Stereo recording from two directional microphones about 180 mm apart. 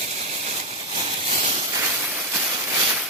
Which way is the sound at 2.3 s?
15° right (ahead or behind).